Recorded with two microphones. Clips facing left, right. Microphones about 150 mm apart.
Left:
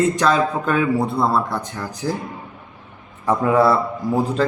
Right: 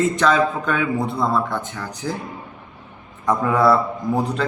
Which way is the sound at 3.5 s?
5° left (ahead or behind).